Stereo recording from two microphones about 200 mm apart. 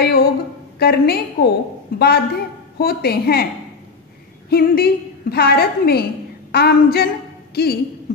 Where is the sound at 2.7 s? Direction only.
50° left (ahead or behind).